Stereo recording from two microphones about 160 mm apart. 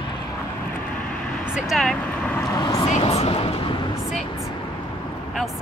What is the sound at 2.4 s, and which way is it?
Vehicle, 25° left (ahead or behind).